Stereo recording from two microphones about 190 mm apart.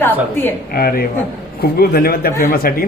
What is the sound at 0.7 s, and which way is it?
A man's voice, 50° left (ahead or behind).